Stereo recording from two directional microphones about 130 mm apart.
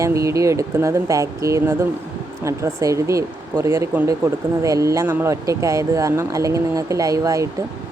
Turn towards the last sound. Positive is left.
turn(degrees=-25)  # may be behind; listen again after turning